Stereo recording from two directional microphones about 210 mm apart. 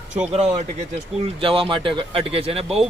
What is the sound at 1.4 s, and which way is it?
A man's voice, 25° right (ahead or behind).